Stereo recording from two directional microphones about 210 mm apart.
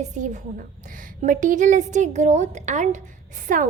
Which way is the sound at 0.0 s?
35° right (ahead or behind).